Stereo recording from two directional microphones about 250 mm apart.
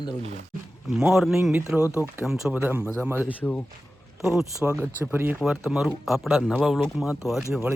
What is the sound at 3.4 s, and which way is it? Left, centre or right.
Speech, centre.